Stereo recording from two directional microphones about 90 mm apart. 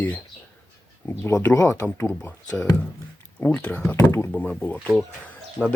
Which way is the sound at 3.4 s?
15° left (ahead or behind).